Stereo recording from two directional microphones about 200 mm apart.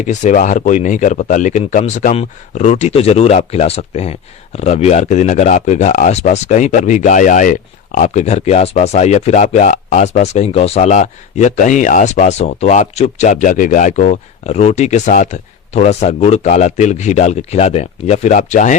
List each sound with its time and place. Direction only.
0.1 s speech: 40° left (ahead or behind)